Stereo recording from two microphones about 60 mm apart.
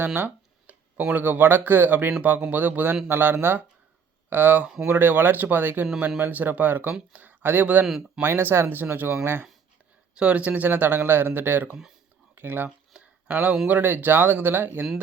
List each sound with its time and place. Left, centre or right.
0.0 s a man's voice: right
8.2 s a man's voice: right
10.2 s a man's voice: right
12.9 s a sound: right
13.7 s a man's voice: right